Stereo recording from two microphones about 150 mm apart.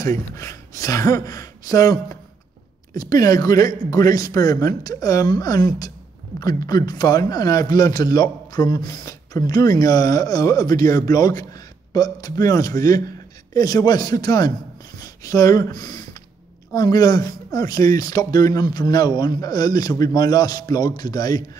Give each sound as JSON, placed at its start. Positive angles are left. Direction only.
{"t": 0.0, "sound": "a man's voice", "side_deg": 20}